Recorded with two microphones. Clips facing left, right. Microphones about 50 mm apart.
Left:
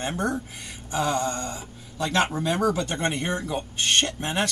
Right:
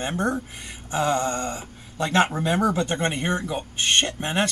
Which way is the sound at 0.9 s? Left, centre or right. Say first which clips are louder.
Right 2 dB; right.